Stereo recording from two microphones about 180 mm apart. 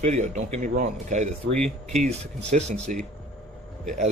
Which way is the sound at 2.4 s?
40° right (ahead or behind).